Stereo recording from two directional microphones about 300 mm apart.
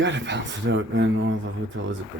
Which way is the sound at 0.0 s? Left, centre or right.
Right.